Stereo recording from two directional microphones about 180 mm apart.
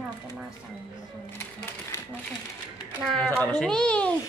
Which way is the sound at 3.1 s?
5° left (ahead or behind).